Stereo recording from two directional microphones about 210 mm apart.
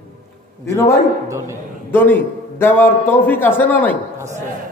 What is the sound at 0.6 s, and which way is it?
A man's voice, 10° left (ahead or behind).